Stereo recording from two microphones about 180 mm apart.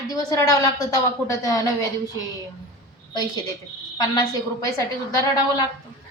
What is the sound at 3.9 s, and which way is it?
Speech, 20° left (ahead or behind).